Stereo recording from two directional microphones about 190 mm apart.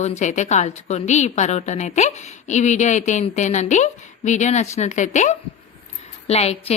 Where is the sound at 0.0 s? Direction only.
35° left (ahead or behind).